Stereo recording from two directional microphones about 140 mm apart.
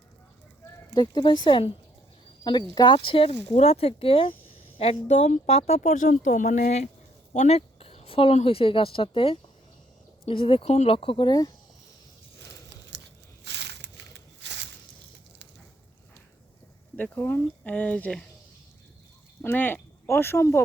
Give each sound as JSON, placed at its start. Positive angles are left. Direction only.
{"t": 0.9, "sound": "a woman's voice", "side_deg": 30}
{"t": 17.0, "sound": "speech", "side_deg": 15}
{"t": 19.4, "sound": "speech", "side_deg": 15}